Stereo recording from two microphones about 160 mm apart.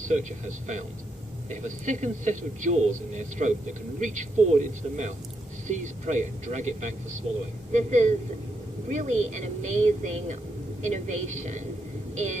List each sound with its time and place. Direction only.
0.1 s a man's voice: 50° right (ahead or behind)
7.3 s a woman's voice: 35° right (ahead or behind)
7.7 s a man's voice: 45° right (ahead or behind)